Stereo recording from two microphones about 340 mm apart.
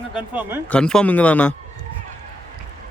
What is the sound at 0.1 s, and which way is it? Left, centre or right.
A man's voice, centre.